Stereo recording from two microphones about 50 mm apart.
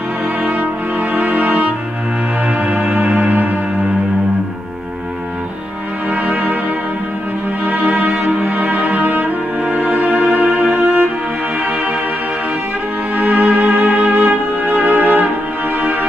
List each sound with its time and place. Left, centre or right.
0.4 s music: right
6.0 s music: right
7.6 s music: right
13.1 s music: right